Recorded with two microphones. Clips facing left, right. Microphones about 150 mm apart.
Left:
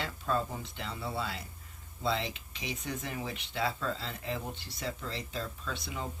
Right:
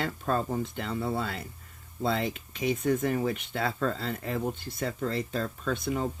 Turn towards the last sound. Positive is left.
turn(degrees=-50)  # may be behind; listen again after turning